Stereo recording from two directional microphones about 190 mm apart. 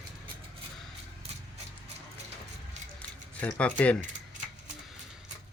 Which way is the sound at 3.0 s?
5° left (ahead or behind).